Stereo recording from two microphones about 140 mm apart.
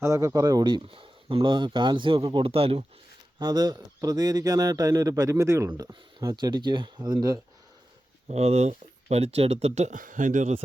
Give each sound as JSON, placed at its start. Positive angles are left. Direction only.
{"t": 0.0, "sound": "speech", "side_deg": -20}
{"t": 3.3, "sound": "speech", "side_deg": -30}
{"t": 8.3, "sound": "speech", "side_deg": -50}